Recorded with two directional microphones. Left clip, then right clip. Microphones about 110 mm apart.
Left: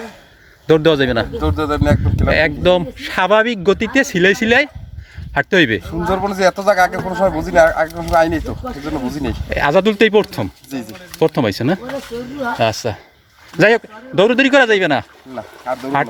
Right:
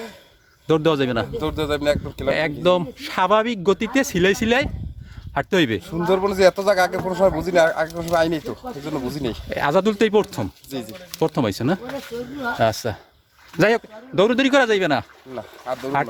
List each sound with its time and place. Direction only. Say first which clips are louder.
0.7 s a man's voice: left 6 dB; 5° right (ahead or behind)
1.4 s speech: left 5 dB; 30° right (ahead or behind)
2.2 s speech: left 6 dB; 10° right (ahead or behind)
5.8 s speech: left 2 dB; 30° right (ahead or behind)
9.5 s speech: left 6 dB; 10° right (ahead or behind)